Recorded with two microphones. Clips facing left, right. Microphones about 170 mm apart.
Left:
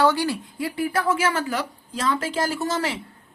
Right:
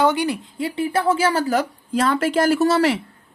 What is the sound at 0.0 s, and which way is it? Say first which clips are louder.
Speech: right 2 dB; 20° right (ahead or behind).